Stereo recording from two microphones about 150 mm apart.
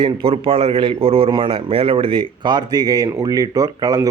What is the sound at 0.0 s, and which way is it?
A man's voice, 35° right (ahead or behind).